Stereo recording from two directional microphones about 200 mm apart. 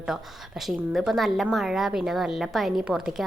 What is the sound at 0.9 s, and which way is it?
A woman's voice, centre (ahead or behind).